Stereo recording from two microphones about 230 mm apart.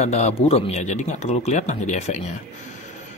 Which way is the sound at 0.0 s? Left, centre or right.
Left.